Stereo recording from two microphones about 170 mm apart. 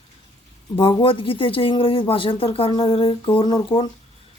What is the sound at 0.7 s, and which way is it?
Speech, 30° left (ahead or behind).